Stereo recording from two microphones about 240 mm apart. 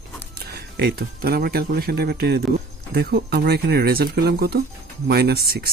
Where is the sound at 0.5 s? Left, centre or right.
Right.